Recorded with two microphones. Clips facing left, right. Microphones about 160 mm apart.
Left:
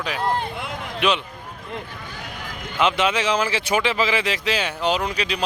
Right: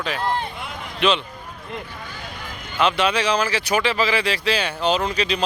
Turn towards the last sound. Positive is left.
turn(degrees=10)  # may be behind; listen again after turning